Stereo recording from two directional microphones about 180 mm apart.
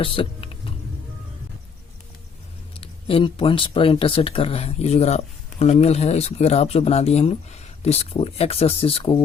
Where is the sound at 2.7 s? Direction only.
30° left (ahead or behind).